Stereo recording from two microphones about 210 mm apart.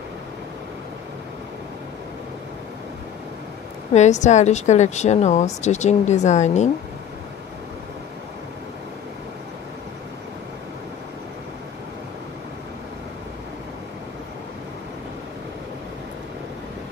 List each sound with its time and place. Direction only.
3.9 s a woman's voice: 35° left (ahead or behind)